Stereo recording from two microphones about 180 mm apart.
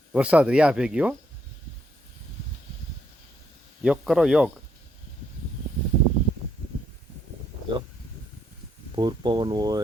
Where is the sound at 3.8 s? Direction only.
5° right (ahead or behind).